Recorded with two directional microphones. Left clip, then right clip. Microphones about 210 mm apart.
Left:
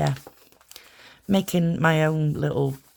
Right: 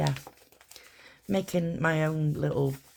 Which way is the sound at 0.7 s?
45° left (ahead or behind).